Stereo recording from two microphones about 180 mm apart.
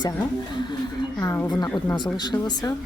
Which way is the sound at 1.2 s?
15° left (ahead or behind).